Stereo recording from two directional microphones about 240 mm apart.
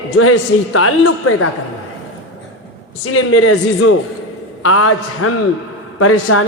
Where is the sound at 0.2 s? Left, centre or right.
Left.